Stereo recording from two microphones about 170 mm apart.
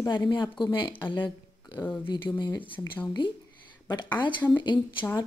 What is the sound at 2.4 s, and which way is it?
Speech, 30° left (ahead or behind).